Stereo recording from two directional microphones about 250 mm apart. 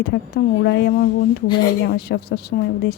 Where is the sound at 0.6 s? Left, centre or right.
Left.